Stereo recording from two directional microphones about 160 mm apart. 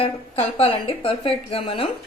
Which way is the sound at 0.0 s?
40° left (ahead or behind).